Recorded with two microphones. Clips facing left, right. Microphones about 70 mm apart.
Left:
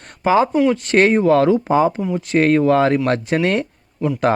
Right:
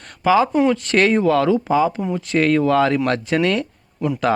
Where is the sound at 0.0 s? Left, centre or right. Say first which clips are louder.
Even; left.